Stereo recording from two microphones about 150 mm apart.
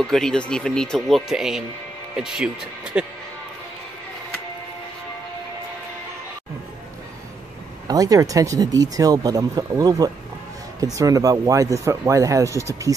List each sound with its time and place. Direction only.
0.0 s speech: 5° left (ahead or behind)
7.9 s speech: 25° right (ahead or behind)